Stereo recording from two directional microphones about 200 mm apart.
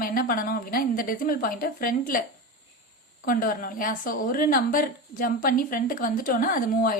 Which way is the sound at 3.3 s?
45° left (ahead or behind).